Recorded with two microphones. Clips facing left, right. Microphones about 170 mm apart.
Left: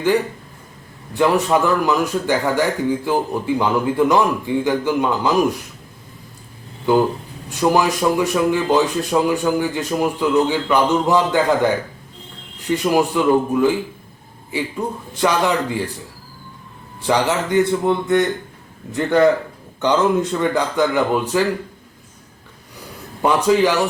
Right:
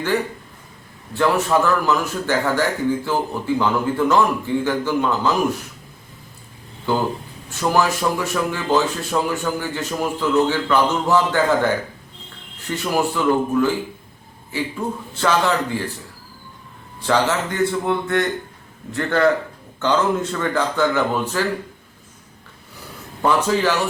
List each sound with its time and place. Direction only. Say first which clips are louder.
1.1 s a man's voice: left 2 dB; 15° left (ahead or behind)
7.6 s a man's voice: left 3 dB; 15° left (ahead or behind)
17.0 s a man's voice: left 1 dB; 15° left (ahead or behind)
23.2 s a man's voice: left 3 dB; 15° left (ahead or behind)